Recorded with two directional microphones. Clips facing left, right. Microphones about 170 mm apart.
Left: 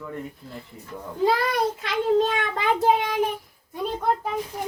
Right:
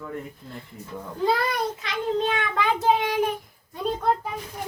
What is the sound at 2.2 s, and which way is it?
Speech, 40° left (ahead or behind).